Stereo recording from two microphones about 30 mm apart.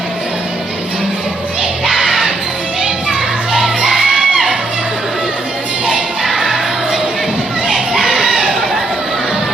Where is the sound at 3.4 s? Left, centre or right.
Centre.